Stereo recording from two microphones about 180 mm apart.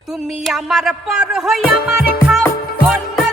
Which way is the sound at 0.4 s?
Centre (ahead or behind).